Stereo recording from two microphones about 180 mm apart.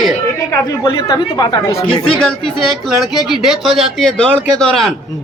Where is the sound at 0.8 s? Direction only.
20° left (ahead or behind).